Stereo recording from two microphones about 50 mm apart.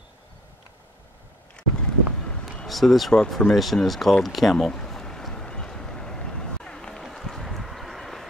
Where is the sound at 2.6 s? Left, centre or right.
Centre.